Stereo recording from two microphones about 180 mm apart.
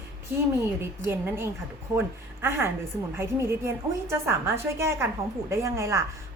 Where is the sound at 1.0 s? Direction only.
10° right (ahead or behind).